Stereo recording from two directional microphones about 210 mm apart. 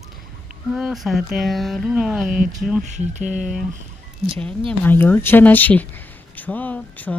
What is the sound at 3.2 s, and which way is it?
Speech, 5° right (ahead or behind).